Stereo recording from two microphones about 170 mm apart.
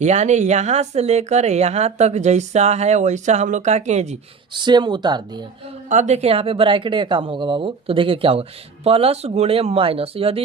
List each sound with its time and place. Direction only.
0.0 s speech: 45° right (ahead or behind)
4.5 s speech: 25° right (ahead or behind)
5.9 s speech: 45° right (ahead or behind)